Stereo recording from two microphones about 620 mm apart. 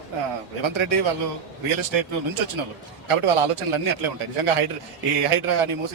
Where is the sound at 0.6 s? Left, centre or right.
Right.